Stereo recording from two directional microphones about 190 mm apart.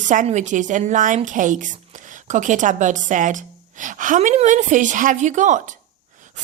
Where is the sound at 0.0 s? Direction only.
40° right (ahead or behind).